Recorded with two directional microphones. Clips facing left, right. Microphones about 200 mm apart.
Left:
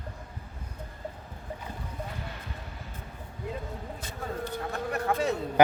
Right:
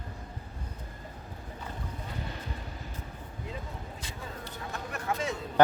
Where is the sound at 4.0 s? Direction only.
50° left (ahead or behind).